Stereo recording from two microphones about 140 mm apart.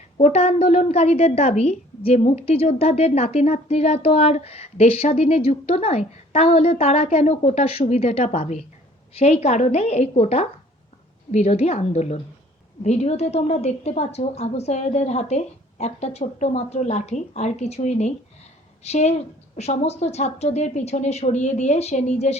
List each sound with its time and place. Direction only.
0.2 s a woman's voice: 50° left (ahead or behind)